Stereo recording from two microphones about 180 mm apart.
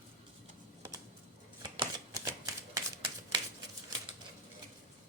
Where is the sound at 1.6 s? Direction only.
20° right (ahead or behind).